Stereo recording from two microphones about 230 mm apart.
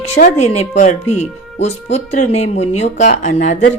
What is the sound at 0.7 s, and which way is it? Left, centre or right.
Speech, left.